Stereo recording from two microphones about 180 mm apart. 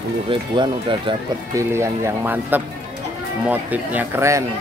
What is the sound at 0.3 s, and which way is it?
Speech, 25° right (ahead or behind).